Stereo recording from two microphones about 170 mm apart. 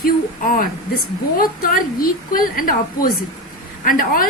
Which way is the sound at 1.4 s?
55° left (ahead or behind).